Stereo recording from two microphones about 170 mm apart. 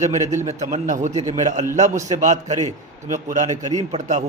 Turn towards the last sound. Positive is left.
turn(degrees=-40)  # may be behind; listen again after turning